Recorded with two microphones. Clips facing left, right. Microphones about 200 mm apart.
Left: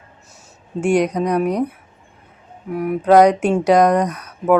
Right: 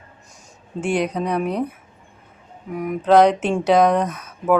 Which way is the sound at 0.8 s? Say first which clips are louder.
Left 5 dB; 10° left (ahead or behind).